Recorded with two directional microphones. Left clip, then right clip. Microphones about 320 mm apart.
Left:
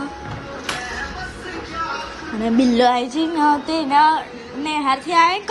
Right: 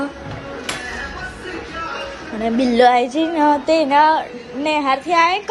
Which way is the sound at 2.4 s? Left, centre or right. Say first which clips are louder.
Right 3 dB; centre.